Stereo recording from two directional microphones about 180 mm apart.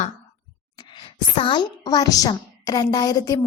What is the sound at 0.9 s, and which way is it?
A woman's voice, 30° left (ahead or behind).